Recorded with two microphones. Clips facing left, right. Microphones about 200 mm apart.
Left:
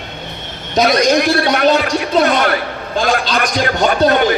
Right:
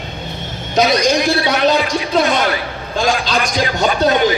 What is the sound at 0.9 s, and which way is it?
A man's voice, 55° left (ahead or behind).